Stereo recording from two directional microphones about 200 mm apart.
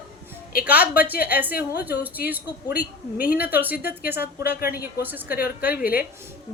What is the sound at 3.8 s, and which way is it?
Speech, 50° left (ahead or behind).